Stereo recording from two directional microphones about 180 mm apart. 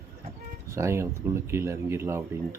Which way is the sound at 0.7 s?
15° right (ahead or behind).